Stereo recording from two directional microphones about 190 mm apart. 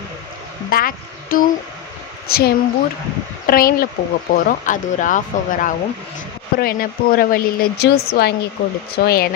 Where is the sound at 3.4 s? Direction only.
50° left (ahead or behind).